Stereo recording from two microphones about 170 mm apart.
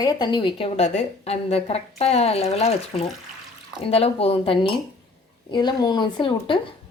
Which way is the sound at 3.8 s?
35° left (ahead or behind).